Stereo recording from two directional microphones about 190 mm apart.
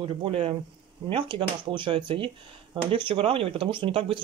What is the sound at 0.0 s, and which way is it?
Speech, 30° right (ahead or behind).